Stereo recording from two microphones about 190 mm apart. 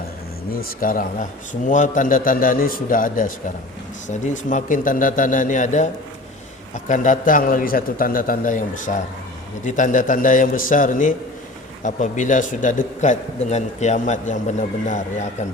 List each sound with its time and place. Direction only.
0.6 s a man's voice: 45° left (ahead or behind)